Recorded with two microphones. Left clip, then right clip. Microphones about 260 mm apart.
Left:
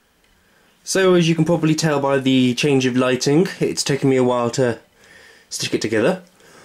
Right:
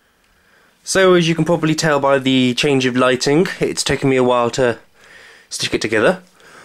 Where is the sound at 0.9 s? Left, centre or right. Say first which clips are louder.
Right 3 dB; centre.